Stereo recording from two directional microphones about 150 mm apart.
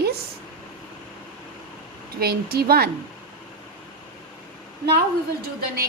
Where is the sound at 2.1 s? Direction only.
90° right.